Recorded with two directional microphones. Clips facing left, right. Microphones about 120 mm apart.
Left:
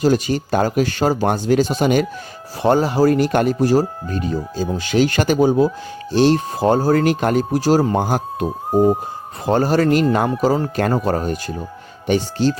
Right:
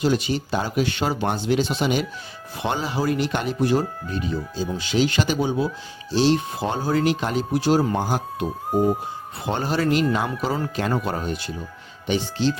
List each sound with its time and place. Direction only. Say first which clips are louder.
0.0 s speech: left 5 dB; 45° left (ahead or behind)
8.4 s speech: left 6 dB; 30° left (ahead or behind)
9.5 s speech: left 7 dB; 40° left (ahead or behind)